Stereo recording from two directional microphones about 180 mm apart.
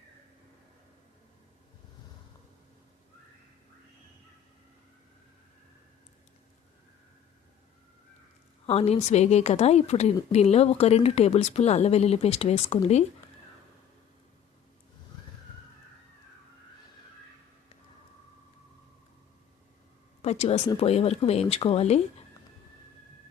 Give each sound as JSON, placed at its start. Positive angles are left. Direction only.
{"t": 8.6, "sound": "speech", "side_deg": 35}
{"t": 20.2, "sound": "speech", "side_deg": 35}